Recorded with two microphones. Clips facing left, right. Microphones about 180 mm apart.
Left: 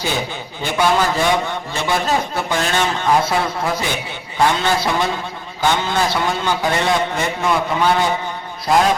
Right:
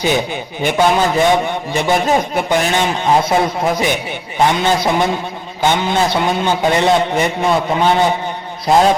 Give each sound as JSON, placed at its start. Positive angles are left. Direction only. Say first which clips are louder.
{"t": 0.6, "sound": "a man's voice", "louder": "right 3 dB", "side_deg": -20}